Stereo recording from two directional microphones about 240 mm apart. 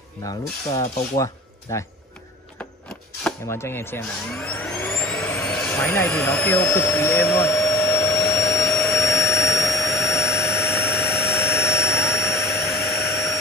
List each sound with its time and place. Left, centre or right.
0.2 s mechanisms: centre
1.1 s speech: centre
3.3 s speech: centre
8.7 s vacuum cleaner: centre
9.4 s jet engine: centre
12.8 s vacuum cleaner: centre